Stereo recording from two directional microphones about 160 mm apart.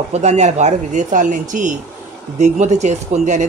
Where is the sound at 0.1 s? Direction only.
45° right (ahead or behind).